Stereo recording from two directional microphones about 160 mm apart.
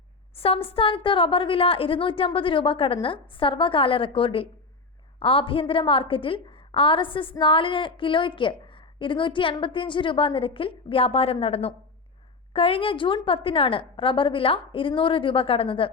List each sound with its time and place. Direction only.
0.3 s a woman's voice: 35° left (ahead or behind)